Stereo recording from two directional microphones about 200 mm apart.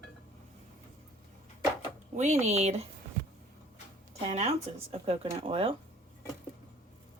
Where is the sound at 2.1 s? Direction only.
35° right (ahead or behind).